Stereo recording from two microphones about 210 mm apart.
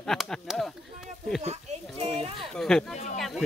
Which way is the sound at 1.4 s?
30° right (ahead or behind).